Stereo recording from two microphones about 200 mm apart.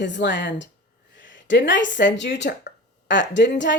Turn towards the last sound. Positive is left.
turn(degrees=60)  # may be behind; listen again after turning